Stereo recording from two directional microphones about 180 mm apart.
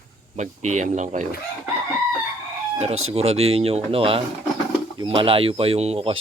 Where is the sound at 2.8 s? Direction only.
35° right (ahead or behind).